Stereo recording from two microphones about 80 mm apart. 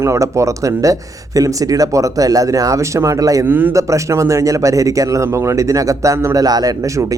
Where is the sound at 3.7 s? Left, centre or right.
Right.